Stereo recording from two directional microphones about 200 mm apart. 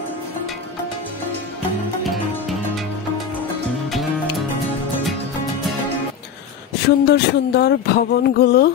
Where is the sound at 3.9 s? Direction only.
Centre (ahead or behind).